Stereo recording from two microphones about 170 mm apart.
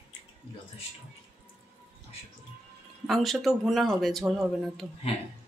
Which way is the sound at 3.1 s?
Centre (ahead or behind).